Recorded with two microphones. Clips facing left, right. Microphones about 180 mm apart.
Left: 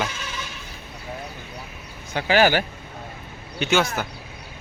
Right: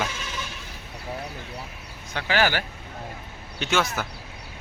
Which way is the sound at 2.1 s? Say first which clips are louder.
Left 5 dB; 15° left (ahead or behind).